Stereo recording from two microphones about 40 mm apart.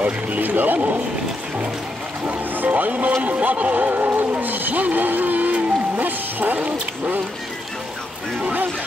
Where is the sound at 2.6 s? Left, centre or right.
Right.